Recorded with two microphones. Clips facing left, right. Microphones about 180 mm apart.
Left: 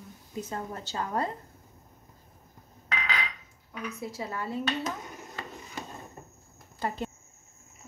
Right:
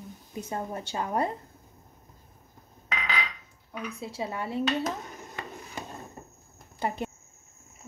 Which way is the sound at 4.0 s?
20° right (ahead or behind).